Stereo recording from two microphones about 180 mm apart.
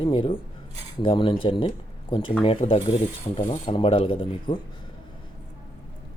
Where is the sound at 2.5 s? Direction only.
30° left (ahead or behind).